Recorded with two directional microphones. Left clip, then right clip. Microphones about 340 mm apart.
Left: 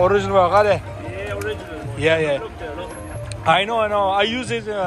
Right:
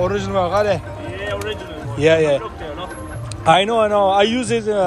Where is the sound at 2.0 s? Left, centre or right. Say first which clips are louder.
Right 4 dB; centre.